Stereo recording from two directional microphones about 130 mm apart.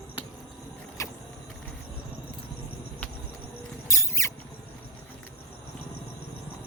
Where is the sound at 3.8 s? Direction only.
25° left (ahead or behind).